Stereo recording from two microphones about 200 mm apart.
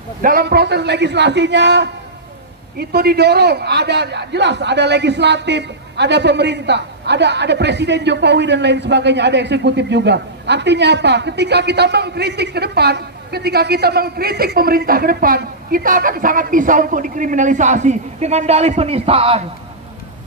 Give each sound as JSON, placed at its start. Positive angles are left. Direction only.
{"t": 0.2, "sound": "a man's voice", "side_deg": -50}